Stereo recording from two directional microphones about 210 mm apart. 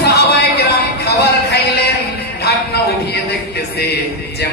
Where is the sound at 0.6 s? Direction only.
50° left (ahead or behind).